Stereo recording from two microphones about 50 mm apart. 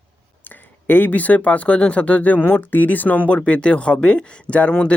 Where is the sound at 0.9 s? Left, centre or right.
Left.